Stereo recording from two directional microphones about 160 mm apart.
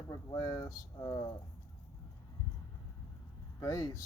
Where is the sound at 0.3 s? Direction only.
20° left (ahead or behind).